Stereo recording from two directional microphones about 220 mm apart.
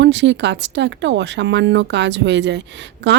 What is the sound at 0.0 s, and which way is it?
Speech, 55° right (ahead or behind).